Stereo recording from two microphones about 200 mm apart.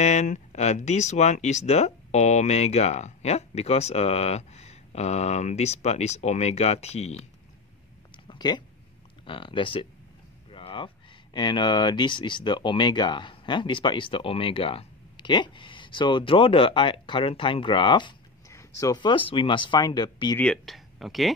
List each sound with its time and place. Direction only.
0.0 s speech: 35° left (ahead or behind)
8.3 s a sound: 20° left (ahead or behind)
9.2 s speech: 25° left (ahead or behind)
10.5 s a sound: 25° left (ahead or behind)
11.3 s speech: 20° left (ahead or behind)
20.3 s speech: 5° left (ahead or behind)